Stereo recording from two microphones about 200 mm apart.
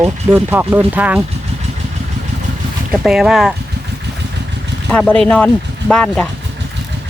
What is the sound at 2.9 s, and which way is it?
Speech, 5° right (ahead or behind).